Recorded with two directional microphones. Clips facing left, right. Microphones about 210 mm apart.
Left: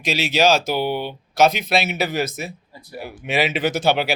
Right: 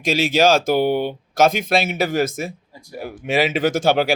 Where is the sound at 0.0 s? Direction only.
50° right (ahead or behind).